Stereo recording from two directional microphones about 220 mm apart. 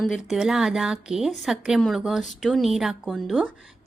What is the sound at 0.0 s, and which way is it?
A woman's voice, centre (ahead or behind).